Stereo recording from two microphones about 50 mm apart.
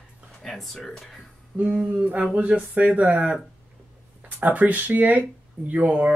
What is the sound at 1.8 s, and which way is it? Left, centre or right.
Speech, right.